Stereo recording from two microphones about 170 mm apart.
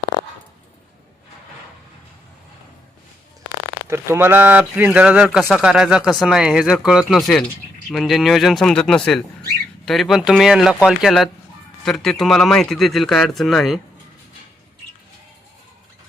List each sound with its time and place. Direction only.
3.8 s speech: 15° right (ahead or behind); by 13.7 s centre (ahead or behind)